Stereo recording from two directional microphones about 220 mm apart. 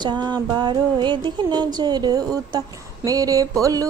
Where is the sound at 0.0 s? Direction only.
20° right (ahead or behind).